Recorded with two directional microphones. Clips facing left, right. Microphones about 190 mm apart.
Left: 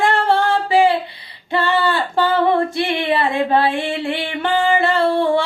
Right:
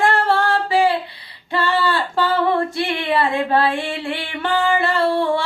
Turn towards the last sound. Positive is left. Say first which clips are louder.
# left 2 dB
turn(degrees=20)  # may be behind; listen again after turning